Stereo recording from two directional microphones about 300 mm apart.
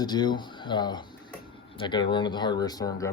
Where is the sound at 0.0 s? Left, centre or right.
Centre.